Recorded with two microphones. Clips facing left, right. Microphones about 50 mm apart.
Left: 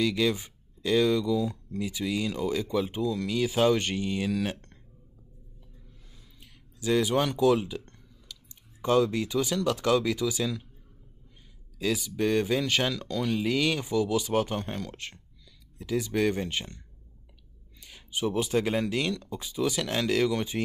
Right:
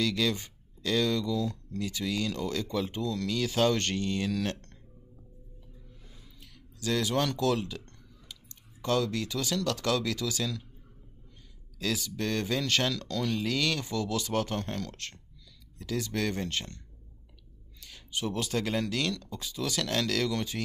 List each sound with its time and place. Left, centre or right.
0.0 s speech: centre
6.4 s speech: centre
11.8 s speech: centre